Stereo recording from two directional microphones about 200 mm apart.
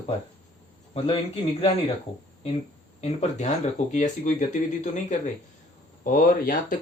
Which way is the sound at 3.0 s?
35° left (ahead or behind).